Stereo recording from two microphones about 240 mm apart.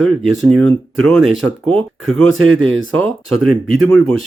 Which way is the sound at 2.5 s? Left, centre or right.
Right.